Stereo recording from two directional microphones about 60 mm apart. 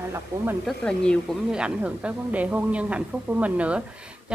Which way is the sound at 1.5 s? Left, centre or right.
Centre.